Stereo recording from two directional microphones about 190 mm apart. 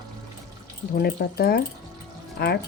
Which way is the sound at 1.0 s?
55° left (ahead or behind).